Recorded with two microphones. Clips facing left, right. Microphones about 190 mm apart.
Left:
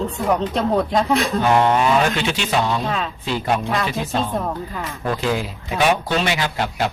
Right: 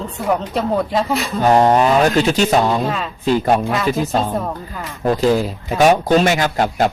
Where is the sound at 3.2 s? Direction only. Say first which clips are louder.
Right 9 dB; 45° right (ahead or behind).